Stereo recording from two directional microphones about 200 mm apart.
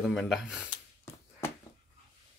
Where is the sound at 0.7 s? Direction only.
15° left (ahead or behind).